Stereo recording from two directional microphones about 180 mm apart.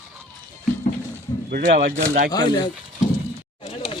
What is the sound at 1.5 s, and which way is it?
Speech, 50° right (ahead or behind).